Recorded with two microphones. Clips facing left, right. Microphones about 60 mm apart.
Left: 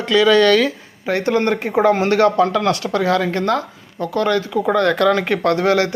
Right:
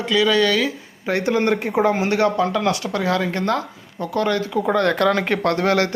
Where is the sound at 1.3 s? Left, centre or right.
Left.